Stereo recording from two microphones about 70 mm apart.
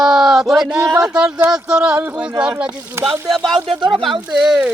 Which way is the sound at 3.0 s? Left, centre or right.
Right.